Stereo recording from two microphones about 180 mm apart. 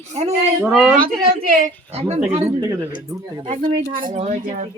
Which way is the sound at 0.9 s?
50° right (ahead or behind).